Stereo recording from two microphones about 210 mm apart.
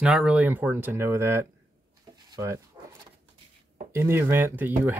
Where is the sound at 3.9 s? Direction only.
10° right (ahead or behind).